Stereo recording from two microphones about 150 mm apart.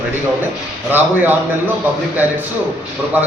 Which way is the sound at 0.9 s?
15° right (ahead or behind).